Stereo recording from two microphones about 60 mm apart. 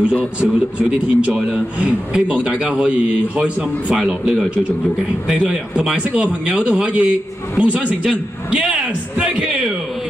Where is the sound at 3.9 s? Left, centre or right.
Centre.